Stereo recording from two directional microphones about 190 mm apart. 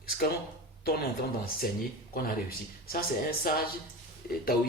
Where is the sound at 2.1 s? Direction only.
50° left (ahead or behind).